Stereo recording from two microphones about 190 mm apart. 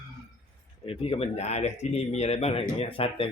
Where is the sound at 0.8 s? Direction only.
30° left (ahead or behind).